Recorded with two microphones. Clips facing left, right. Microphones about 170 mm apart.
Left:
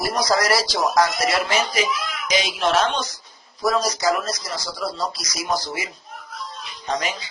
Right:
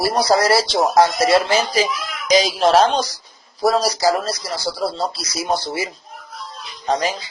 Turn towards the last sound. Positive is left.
turn(degrees=-35)  # may be behind; listen again after turning